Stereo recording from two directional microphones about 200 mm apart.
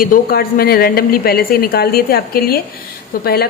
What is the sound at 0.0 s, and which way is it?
Speech, 50° left (ahead or behind).